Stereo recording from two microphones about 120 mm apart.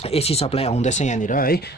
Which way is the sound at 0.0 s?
55° left (ahead or behind).